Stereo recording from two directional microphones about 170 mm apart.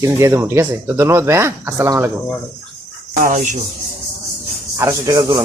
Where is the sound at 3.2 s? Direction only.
50° right (ahead or behind).